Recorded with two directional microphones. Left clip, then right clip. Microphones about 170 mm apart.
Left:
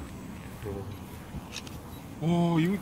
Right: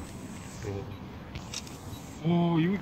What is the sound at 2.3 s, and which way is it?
Speech, 60° left (ahead or behind).